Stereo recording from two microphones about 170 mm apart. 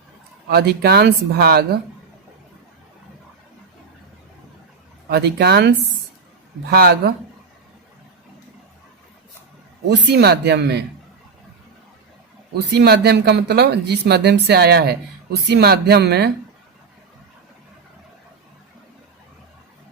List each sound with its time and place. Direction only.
0.4 s speech: 75° right (ahead or behind)
5.0 s speech: 70° right (ahead or behind)
9.8 s speech: 85° right
12.8 s speech: 75° right (ahead or behind)